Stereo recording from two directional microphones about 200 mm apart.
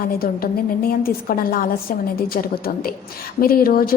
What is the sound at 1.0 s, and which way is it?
A woman's voice, 45° left (ahead or behind).